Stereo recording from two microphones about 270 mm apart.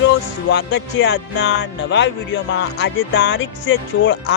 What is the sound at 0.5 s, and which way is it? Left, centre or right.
Speech, left.